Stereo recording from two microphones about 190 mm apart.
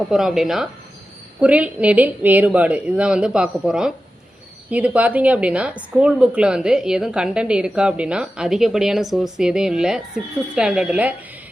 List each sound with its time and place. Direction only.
0.1 s a woman's voice: centre (ahead or behind)